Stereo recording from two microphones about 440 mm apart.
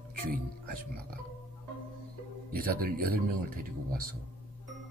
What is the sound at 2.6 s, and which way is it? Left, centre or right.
Speech, centre.